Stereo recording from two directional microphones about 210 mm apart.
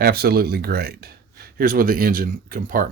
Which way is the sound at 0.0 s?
50° right (ahead or behind).